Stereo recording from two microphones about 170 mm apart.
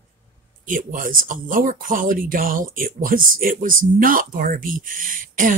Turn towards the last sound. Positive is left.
turn(degrees=-55)  # may be behind; listen again after turning